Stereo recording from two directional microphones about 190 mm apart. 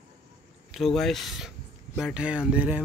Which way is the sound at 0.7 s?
Centre (ahead or behind).